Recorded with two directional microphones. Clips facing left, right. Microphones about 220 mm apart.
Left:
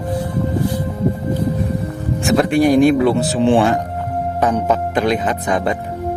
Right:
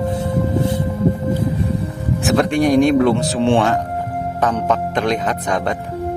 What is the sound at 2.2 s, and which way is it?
A man's voice, centre (ahead or behind).